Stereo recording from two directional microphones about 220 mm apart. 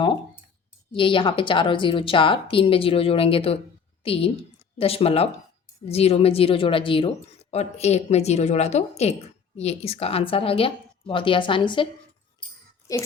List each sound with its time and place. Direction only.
0.9 s a woman's voice: 25° left (ahead or behind)